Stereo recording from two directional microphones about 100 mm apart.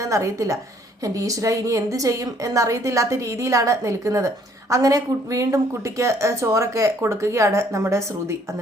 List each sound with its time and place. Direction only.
0.0 s a woman's voice: 30° right (ahead or behind)